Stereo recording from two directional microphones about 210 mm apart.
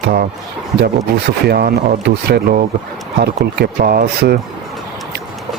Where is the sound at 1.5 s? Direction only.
50° right (ahead or behind).